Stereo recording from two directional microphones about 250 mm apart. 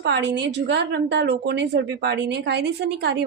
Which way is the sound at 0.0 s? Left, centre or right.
Right.